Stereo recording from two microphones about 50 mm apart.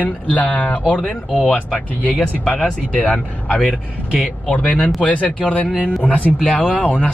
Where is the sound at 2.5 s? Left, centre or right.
Left.